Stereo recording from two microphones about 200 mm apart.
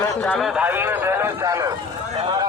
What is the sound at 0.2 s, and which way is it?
A man's voice, 5° left (ahead or behind).